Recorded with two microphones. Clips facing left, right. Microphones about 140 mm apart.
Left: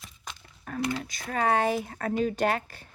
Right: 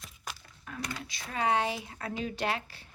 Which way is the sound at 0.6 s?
45° left (ahead or behind).